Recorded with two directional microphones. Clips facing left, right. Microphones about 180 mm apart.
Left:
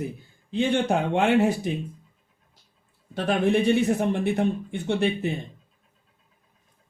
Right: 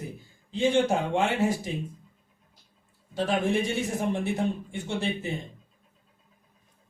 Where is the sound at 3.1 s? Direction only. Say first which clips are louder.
Left 3 dB; 60° left (ahead or behind).